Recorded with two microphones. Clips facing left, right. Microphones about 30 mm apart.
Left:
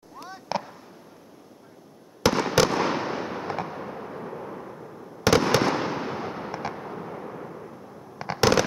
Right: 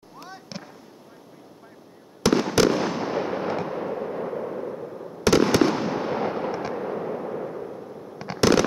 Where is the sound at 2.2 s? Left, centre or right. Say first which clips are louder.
Right 2 dB; centre.